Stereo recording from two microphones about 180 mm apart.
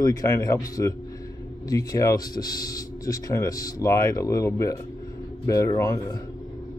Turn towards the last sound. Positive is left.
turn(degrees=20)  # may be behind; listen again after turning